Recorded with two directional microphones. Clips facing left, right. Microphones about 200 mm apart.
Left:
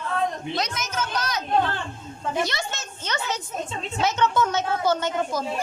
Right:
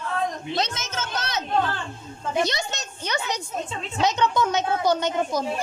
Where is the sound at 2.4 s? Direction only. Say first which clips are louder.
Right 4 dB; 20° right (ahead or behind).